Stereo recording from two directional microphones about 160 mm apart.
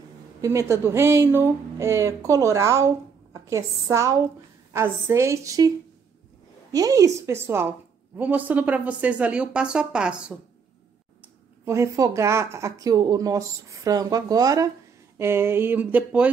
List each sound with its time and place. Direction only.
0.4 s a woman's voice: 20° right (ahead or behind)
6.7 s speech: 20° right (ahead or behind); by 10.3 s 5° right (ahead or behind)
11.6 s a woman's voice: 20° right (ahead or behind)